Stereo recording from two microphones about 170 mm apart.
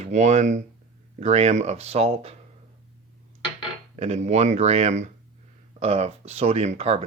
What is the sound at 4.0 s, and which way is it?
Speech, 40° right (ahead or behind).